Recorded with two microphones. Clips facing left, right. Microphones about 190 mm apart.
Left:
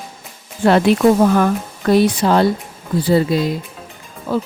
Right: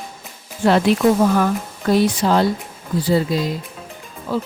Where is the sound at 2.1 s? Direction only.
60° left (ahead or behind).